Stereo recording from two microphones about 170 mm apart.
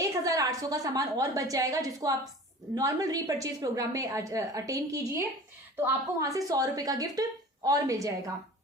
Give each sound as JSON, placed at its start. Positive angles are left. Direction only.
{"t": 0.3, "sound": "a woman's voice", "side_deg": -20}